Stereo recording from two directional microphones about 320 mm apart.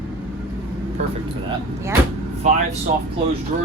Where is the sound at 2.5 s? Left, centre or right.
Right.